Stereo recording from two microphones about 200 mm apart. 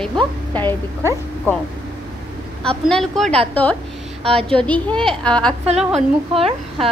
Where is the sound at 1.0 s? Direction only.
15° right (ahead or behind).